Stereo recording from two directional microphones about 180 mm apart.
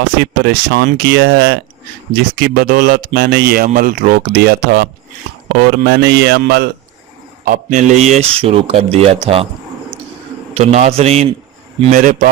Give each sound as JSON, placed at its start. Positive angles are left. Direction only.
{"t": 0.2, "sound": "speech", "side_deg": -65}
{"t": 4.3, "sound": "speech", "side_deg": -65}
{"t": 7.4, "sound": "speech", "side_deg": -45}
{"t": 10.5, "sound": "speech", "side_deg": -35}